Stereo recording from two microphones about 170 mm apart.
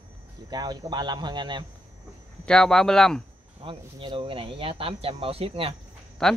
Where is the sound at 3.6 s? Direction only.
30° right (ahead or behind).